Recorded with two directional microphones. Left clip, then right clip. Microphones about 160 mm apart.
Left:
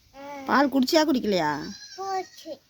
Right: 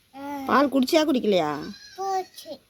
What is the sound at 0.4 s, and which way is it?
Speech, 15° left (ahead or behind).